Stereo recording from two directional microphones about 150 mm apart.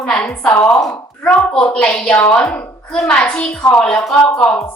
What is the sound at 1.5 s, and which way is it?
A woman's voice, 5° left (ahead or behind).